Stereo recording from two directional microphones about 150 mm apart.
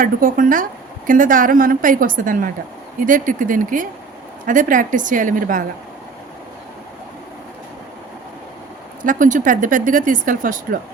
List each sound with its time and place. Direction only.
0.0 s speech: 65° right (ahead or behind)
9.0 s speech: 60° right (ahead or behind)